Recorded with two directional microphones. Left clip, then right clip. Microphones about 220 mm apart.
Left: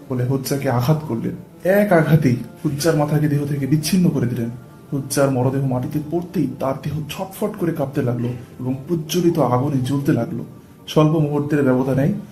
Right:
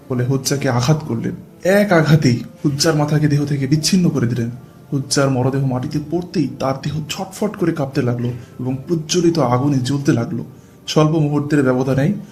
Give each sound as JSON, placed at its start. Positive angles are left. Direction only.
{"t": 0.1, "sound": "speech", "side_deg": -35}